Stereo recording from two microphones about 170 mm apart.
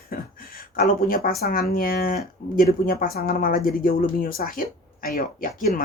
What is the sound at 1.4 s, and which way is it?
Speech, 55° left (ahead or behind).